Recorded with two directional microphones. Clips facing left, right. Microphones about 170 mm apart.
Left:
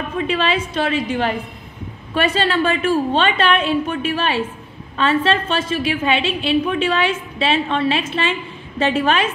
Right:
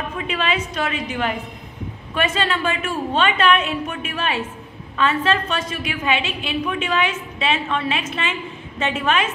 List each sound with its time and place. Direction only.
0.3 s a woman's voice: 30° left (ahead or behind)